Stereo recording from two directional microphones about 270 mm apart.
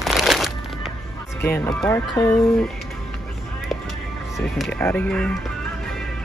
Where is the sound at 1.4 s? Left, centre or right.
Centre.